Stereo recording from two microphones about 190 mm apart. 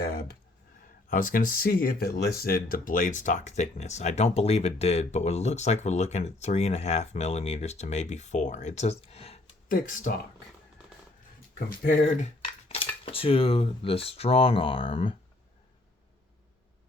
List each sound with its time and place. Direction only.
0.0 s speech: 55° left (ahead or behind); by 9.4 s 30° left (ahead or behind)
9.6 s speech: 45° left (ahead or behind)
11.8 s cutlery: 40° left (ahead or behind)
13.1 s speech: 30° left (ahead or behind)